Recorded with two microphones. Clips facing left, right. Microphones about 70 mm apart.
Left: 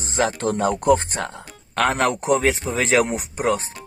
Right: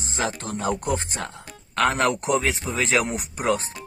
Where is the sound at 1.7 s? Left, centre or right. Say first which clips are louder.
Left 1 dB; left.